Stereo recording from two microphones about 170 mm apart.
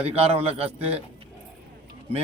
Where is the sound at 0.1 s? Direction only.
35° right (ahead or behind).